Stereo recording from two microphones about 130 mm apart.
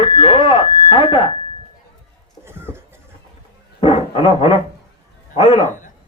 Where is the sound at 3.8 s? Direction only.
45° left (ahead or behind).